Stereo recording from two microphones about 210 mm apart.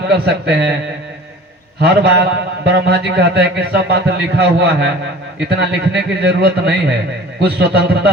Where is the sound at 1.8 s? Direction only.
50° right (ahead or behind).